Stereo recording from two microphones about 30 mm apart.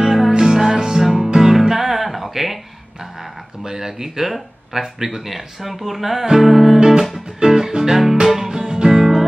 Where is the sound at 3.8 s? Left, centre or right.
Centre.